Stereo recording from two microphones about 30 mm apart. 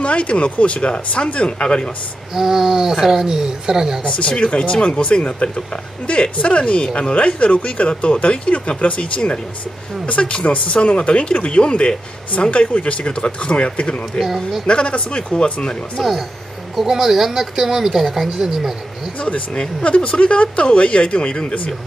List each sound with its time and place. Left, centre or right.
0.0 s speech: left
2.3 s speech: centre
4.4 s speech: left
10.0 s speech: left
12.3 s speech: left
14.2 s speech: centre
14.7 s speech: left
16.0 s speech: centre
16.8 s speech: centre
19.8 s speech: left